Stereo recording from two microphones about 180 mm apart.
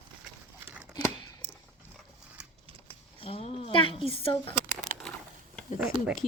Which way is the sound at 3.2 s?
35° left (ahead or behind).